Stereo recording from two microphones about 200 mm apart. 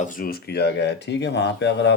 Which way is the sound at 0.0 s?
45° left (ahead or behind).